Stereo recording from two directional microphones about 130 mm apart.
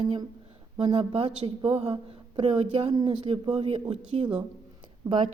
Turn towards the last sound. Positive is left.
turn(degrees=-25)  # may be behind; listen again after turning